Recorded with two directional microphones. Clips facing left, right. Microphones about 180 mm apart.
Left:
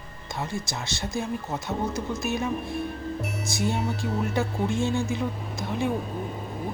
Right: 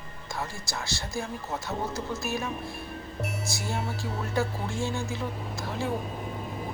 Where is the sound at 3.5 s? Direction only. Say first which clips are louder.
Left 10 dB; 20° left (ahead or behind).